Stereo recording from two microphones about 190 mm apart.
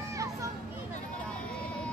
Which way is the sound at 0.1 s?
15° right (ahead or behind).